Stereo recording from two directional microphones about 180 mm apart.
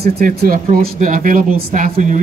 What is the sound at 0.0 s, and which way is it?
Speech, 55° right (ahead or behind).